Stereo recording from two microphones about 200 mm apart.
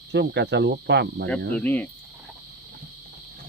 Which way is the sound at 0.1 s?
60° right (ahead or behind).